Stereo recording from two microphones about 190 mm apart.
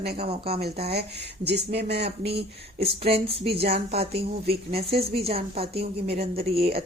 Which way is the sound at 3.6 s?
55° right (ahead or behind).